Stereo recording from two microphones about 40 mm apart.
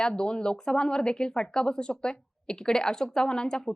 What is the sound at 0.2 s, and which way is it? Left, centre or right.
A woman's voice, centre.